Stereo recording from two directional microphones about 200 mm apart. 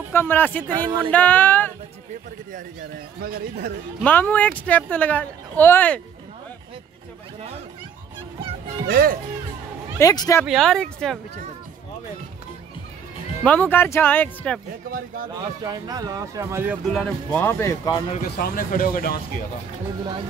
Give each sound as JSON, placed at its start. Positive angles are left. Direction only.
{"t": 0.1, "sound": "speech", "side_deg": 10}
{"t": 0.7, "sound": "speech", "side_deg": -20}
{"t": 1.1, "sound": "speech", "side_deg": 10}
{"t": 3.2, "sound": "speech", "side_deg": -50}
{"t": 4.0, "sound": "speech", "side_deg": 10}
{"t": 8.8, "sound": "speech", "side_deg": -45}
{"t": 9.9, "sound": "speech", "side_deg": 15}
{"t": 10.4, "sound": "speech", "side_deg": 0}
{"t": 13.4, "sound": "speech", "side_deg": 10}
{"t": 14.9, "sound": "speech", "side_deg": -45}
{"t": 15.6, "sound": "speech", "side_deg": -20}
{"t": 16.9, "sound": "speech", "side_deg": 5}
{"t": 18.1, "sound": "speech", "side_deg": 45}